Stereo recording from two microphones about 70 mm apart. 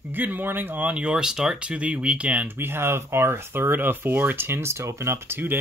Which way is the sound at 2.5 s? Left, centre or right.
Right.